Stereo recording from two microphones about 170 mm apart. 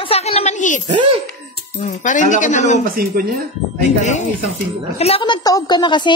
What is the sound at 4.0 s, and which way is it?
Speech, 45° left (ahead or behind).